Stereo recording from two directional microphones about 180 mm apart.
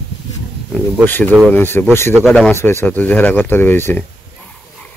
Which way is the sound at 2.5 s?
15° left (ahead or behind).